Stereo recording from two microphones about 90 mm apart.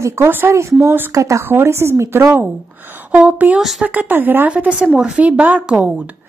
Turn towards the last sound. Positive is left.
turn(degrees=-15)  # may be behind; listen again after turning